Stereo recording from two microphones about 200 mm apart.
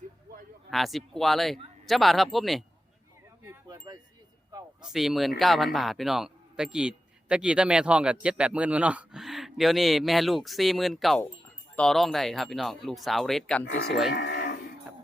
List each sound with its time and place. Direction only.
0.7 s speech: centre (ahead or behind)
3.5 s wind chime: 15° right (ahead or behind)
4.9 s speech: centre (ahead or behind)
14.1 s livestock: 55° left (ahead or behind)